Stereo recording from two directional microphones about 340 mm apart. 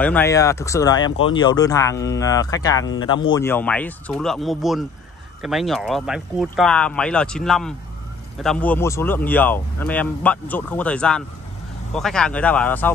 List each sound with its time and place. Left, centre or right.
0.0 s speech: centre
2.8 s speech: left
3.1 s speech: centre